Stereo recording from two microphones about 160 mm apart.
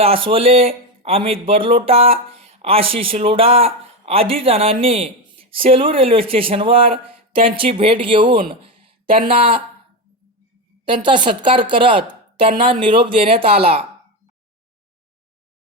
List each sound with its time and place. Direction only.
0.0 s speech: 35° right (ahead or behind)
10.8 s speech: 30° right (ahead or behind)